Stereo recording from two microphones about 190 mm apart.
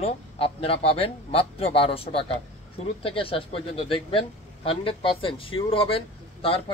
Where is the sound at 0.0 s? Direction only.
30° left (ahead or behind).